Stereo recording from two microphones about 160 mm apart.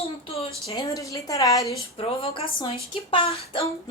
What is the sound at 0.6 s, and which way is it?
A woman's voice, 20° left (ahead or behind).